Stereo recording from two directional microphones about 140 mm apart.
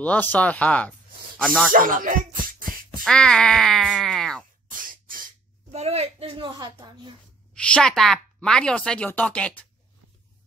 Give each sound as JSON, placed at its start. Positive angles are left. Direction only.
{"t": 0.0, "sound": "a woman's voice", "side_deg": 10}
{"t": 1.7, "sound": "speech", "side_deg": -80}
{"t": 3.0, "sound": "speech", "side_deg": 5}
{"t": 4.6, "sound": "beatboxing", "side_deg": -80}
{"t": 5.7, "sound": "a woman's voice", "side_deg": -50}
{"t": 7.5, "sound": "a woman's voice", "side_deg": 10}